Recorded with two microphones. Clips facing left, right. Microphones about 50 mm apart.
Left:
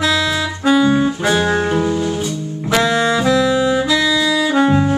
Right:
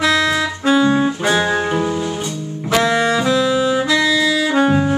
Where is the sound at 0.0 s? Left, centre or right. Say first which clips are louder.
Right 1 dB; right.